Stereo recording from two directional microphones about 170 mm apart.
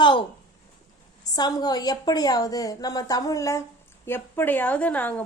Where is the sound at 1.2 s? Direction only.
20° left (ahead or behind).